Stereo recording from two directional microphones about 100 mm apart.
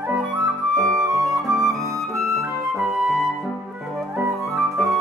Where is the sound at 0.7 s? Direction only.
Centre (ahead or behind).